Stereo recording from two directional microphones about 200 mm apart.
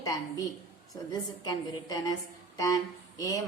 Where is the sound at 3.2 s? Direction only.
15° left (ahead or behind).